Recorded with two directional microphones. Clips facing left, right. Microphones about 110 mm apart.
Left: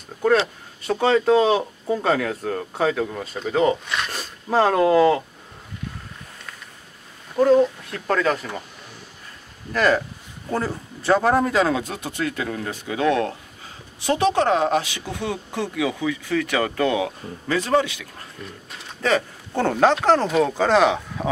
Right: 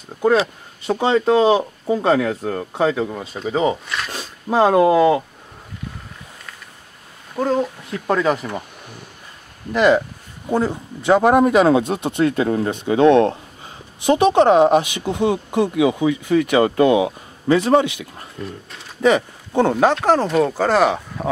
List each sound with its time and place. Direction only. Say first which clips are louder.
0.8 s speech: right 1 dB; 15° right (ahead or behind)
7.3 s speech: left 4 dB; 5° right (ahead or behind)
9.7 s speech: right 5 dB; 20° right (ahead or behind)